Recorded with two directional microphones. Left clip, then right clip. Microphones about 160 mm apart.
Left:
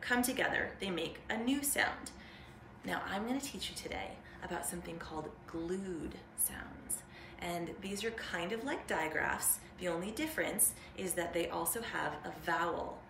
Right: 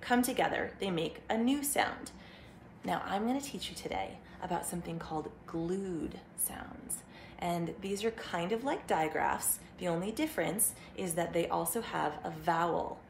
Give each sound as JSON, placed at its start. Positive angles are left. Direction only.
{"t": 0.0, "sound": "a woman's voice", "side_deg": -30}